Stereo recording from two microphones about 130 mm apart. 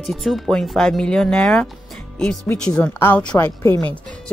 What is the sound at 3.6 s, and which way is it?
Speech, 25° left (ahead or behind).